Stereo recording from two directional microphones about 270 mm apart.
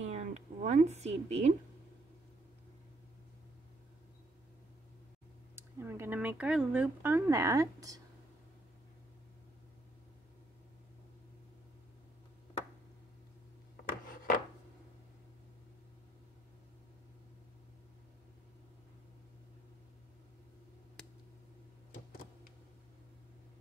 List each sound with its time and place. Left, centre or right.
0.1 s a sound: right
5.6 s speech: centre
13.8 s rub: left